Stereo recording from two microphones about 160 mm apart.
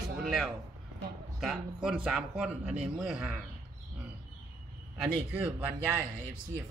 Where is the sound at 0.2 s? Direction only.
Centre (ahead or behind).